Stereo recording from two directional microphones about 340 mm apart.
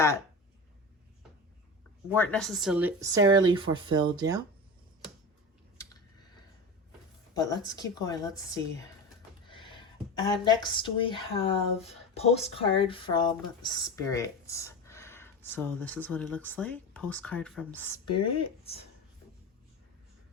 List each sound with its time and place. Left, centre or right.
2.1 s speech: centre
7.3 s speech: centre
10.4 s speech: centre
18.1 s speech: left
18.3 s speech: centre